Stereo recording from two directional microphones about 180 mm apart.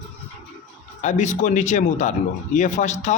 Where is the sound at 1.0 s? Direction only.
40° left (ahead or behind).